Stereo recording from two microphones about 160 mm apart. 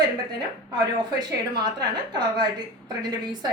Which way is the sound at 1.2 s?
25° right (ahead or behind).